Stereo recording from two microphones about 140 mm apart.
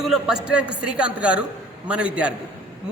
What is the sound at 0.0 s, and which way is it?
A woman's voice, centre (ahead or behind).